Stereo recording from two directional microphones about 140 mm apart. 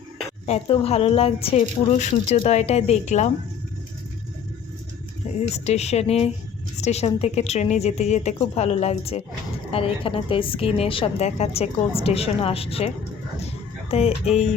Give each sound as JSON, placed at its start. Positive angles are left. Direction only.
{"t": 0.4, "sound": "a woman's voice", "side_deg": 45}
{"t": 5.5, "sound": "a woman's voice", "side_deg": 50}
{"t": 13.9, "sound": "a woman's voice", "side_deg": 50}